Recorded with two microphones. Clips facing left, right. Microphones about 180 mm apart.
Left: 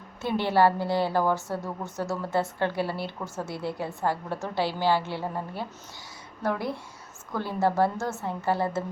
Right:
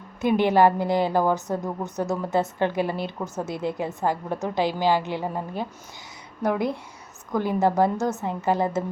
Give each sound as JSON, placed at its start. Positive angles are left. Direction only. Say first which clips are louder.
{"t": 0.2, "sound": "a woman's voice", "louder": "right 4 dB", "side_deg": -15}